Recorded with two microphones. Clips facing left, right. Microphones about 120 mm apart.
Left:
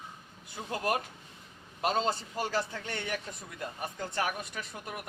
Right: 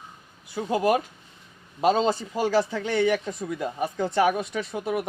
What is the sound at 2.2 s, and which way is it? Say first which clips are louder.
Speech: right 9 dB; 90° right.